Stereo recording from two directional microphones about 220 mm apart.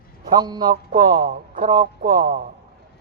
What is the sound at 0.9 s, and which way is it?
Speech, 40° right (ahead or behind).